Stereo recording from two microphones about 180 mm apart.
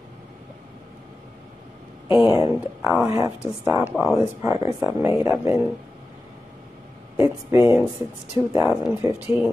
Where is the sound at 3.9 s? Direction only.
5° right (ahead or behind).